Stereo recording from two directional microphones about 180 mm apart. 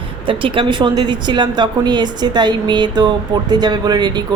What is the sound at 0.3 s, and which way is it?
A woman's voice, 30° right (ahead or behind).